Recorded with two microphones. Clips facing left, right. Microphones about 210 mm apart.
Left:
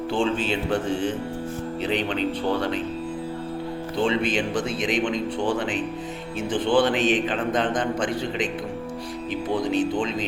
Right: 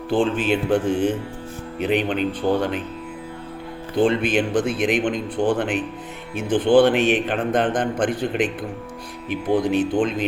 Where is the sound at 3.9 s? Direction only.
55° right (ahead or behind).